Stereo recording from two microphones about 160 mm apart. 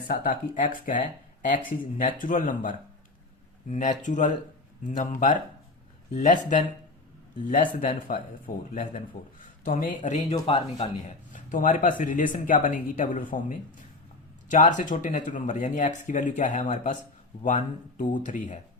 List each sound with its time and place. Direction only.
0.1 s speech: 55° left (ahead or behind)
10.3 s speech: 30° left (ahead or behind)
10.8 s speech: 50° left (ahead or behind)